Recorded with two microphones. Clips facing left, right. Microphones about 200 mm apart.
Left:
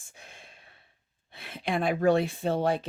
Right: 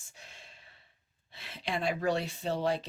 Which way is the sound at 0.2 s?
55° left (ahead or behind).